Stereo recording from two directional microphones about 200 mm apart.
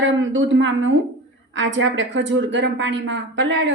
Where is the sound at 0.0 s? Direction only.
70° right (ahead or behind).